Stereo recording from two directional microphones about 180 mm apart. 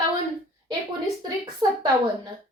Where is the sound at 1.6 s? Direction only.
20° right (ahead or behind).